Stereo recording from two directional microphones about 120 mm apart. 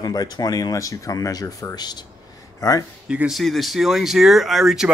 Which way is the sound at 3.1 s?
5° right (ahead or behind).